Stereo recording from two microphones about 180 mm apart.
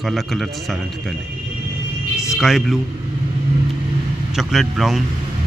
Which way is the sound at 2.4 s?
Centre (ahead or behind).